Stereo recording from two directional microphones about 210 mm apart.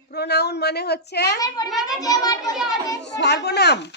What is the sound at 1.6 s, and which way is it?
Speech, centre (ahead or behind).